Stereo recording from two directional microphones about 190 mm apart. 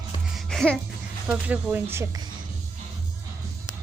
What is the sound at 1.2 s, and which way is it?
Speech, 10° right (ahead or behind).